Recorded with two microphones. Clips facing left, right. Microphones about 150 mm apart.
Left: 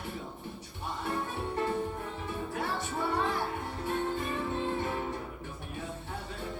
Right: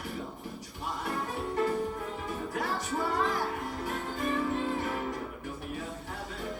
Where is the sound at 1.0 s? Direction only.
25° left (ahead or behind).